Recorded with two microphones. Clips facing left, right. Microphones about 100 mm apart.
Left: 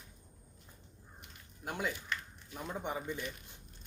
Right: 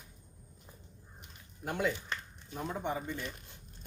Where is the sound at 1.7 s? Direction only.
5° left (ahead or behind).